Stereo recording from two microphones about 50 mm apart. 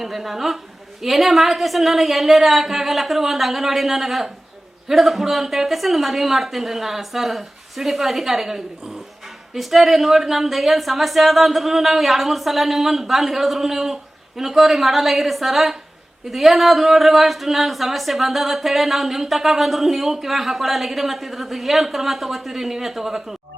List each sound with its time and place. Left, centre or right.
0.0 s speech: centre